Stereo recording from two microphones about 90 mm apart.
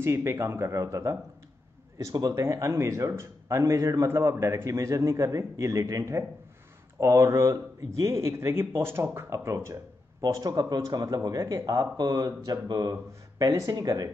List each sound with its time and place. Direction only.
0.0 s speech: 30° right (ahead or behind)